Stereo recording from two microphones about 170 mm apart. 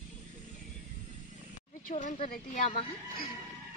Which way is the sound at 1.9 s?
40° left (ahead or behind).